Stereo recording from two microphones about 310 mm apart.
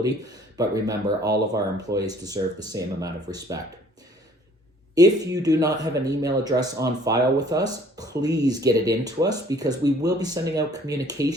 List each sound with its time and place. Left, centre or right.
0.5 s speech: centre
4.9 s speech: centre
10.4 s speech: right
10.7 s speech: centre